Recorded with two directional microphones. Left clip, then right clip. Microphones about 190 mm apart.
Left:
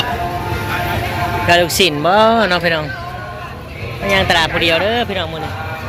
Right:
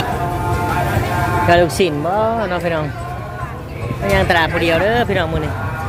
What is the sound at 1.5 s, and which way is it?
Speech, 10° right (ahead or behind).